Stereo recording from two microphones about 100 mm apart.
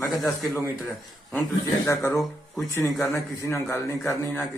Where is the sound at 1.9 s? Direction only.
30° left (ahead or behind).